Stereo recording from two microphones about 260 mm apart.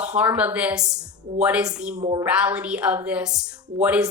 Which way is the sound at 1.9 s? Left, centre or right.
Right.